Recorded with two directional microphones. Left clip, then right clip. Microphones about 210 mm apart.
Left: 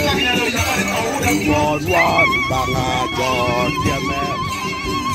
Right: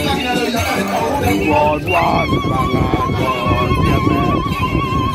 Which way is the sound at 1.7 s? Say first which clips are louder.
Right 1 dB; 45° left (ahead or behind).